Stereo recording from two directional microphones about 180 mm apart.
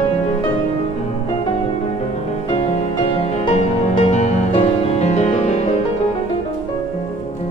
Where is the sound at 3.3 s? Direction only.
40° left (ahead or behind).